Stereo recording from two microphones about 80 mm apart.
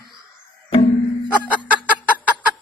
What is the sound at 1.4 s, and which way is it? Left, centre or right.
Fowl, left.